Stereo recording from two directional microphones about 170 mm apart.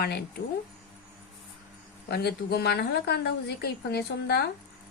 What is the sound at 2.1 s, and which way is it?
Speech, 70° left (ahead or behind).